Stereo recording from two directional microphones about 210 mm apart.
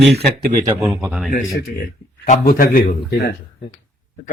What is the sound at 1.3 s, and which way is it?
A man's voice, 45° left (ahead or behind).